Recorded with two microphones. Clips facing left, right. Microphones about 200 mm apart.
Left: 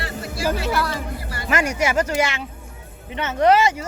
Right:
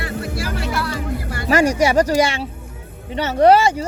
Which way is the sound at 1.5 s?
30° right (ahead or behind).